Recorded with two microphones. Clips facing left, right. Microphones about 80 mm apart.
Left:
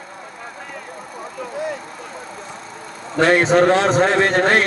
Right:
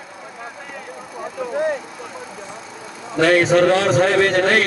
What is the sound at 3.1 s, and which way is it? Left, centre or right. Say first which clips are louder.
A man's voice: even; left.